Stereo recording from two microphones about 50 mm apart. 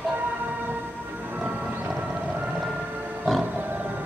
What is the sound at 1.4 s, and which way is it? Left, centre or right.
Music, right.